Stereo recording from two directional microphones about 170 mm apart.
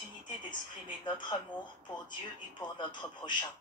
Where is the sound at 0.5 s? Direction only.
25° left (ahead or behind).